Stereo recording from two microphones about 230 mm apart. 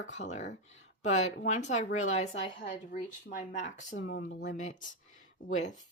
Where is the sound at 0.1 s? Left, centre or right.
Left.